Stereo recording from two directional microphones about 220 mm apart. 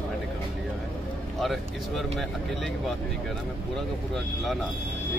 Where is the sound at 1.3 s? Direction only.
Centre (ahead or behind).